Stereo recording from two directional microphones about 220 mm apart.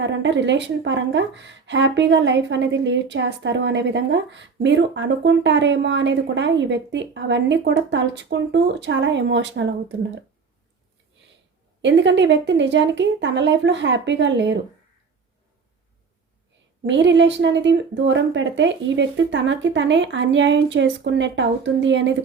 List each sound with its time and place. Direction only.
0.0 s speech: 55° right (ahead or behind)
11.8 s speech: 55° right (ahead or behind)
16.8 s a woman's voice: 55° right (ahead or behind)